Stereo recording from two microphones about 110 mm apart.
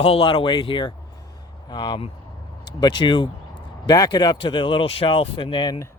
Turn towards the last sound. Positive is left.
turn(degrees=40)  # may be behind; listen again after turning